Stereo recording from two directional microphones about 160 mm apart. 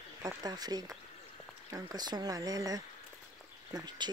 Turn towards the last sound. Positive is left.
turn(degrees=-25)  # may be behind; listen again after turning